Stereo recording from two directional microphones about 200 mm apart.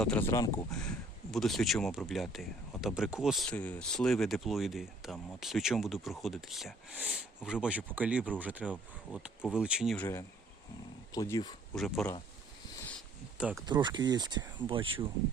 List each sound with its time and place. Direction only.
0.0 s speech: 10° left (ahead or behind)
1.3 s speech: centre (ahead or behind)
10.0 s speech: 15° left (ahead or behind)
11.7 s speech: centre (ahead or behind)
13.4 s speech: 5° right (ahead or behind)
13.7 s speech: 20° right (ahead or behind)